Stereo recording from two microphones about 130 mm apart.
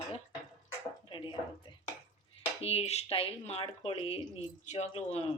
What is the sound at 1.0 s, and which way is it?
Speech, 40° left (ahead or behind).